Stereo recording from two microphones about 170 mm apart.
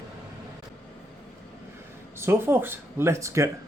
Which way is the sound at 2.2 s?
15° right (ahead or behind).